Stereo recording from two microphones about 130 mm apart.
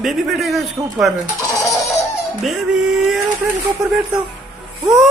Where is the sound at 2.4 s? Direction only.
Centre (ahead or behind).